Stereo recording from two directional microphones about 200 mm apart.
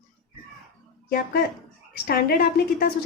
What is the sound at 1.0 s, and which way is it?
A woman's voice, 50° left (ahead or behind).